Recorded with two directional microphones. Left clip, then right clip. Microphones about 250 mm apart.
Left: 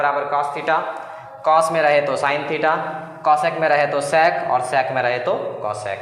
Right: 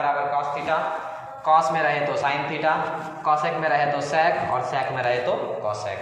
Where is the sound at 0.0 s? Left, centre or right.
Left.